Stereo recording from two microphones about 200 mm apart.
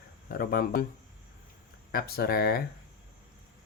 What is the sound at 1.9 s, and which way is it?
Speech, 50° left (ahead or behind).